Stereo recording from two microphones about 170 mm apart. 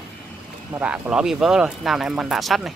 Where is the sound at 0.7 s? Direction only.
5° right (ahead or behind).